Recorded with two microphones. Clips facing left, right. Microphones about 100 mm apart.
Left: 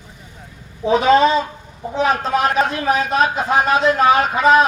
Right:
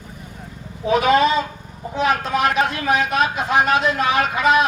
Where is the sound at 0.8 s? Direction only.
30° left (ahead or behind).